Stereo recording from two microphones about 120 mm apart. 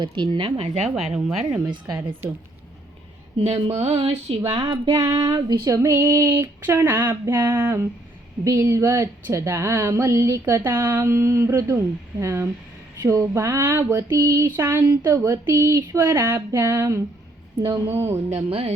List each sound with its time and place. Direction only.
0.0 s speech: 45° right (ahead or behind)
0.9 s speech: 5° right (ahead or behind)
1.9 s a sound: 20° right (ahead or behind)
3.3 s speech: 50° right (ahead or behind)
4.5 s a sound: 35° right (ahead or behind)
18.4 s speech: 50° right (ahead or behind)